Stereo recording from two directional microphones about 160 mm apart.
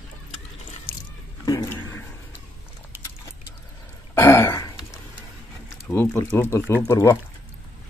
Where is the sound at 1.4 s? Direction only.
20° left (ahead or behind).